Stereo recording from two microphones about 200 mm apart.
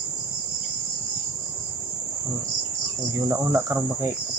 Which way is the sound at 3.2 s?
15° right (ahead or behind).